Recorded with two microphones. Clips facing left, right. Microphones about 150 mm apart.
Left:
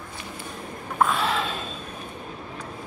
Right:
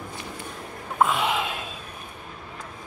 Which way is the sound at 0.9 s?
15° right (ahead or behind).